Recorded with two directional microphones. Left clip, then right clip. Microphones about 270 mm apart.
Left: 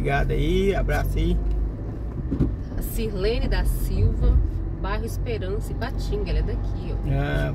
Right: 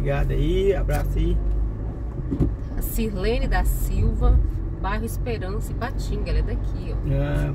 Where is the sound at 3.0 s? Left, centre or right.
Right.